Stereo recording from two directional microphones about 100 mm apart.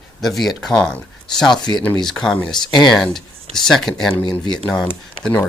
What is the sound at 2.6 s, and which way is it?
Speech, 45° left (ahead or behind).